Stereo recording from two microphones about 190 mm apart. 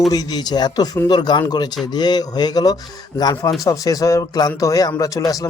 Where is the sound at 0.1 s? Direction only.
20° left (ahead or behind).